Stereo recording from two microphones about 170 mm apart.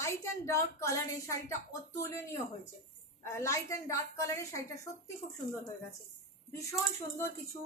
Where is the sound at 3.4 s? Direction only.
15° left (ahead or behind).